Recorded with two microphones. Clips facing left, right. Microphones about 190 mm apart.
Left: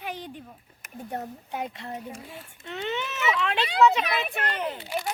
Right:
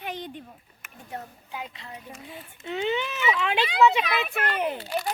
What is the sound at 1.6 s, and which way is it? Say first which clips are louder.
Speech: left 6 dB; 50° left (ahead or behind).